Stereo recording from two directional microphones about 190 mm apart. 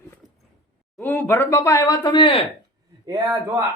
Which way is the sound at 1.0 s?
10° left (ahead or behind).